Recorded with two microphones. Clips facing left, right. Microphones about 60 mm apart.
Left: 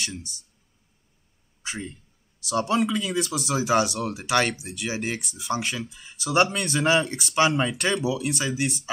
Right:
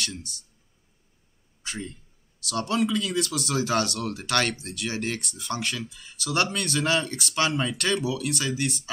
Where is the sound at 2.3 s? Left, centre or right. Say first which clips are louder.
Left 3 dB; centre.